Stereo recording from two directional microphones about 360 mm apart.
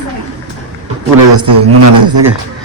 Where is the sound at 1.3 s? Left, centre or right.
Right.